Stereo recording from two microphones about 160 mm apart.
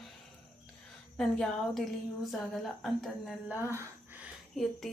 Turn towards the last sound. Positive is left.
turn(degrees=0)  # may be behind; listen again after turning